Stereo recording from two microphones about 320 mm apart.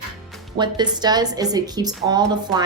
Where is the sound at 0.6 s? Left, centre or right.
Centre.